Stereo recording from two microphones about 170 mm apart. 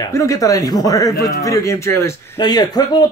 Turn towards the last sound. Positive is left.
turn(degrees=25)  # may be behind; listen again after turning